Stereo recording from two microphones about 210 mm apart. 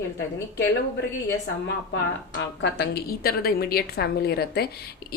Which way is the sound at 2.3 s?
55° left (ahead or behind).